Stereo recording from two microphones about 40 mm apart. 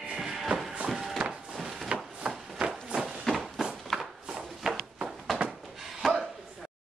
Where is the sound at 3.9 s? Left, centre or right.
Centre.